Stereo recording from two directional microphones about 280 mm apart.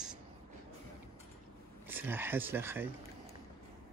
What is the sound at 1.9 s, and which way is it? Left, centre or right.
Speech, centre.